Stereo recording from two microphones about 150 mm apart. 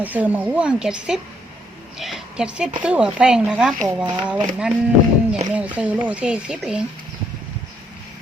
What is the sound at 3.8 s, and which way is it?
Speech, 30° right (ahead or behind).